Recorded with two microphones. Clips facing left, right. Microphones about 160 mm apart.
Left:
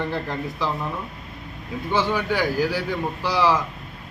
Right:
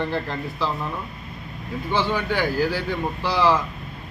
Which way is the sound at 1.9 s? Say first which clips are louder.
Left 1 dB; 15° left (ahead or behind).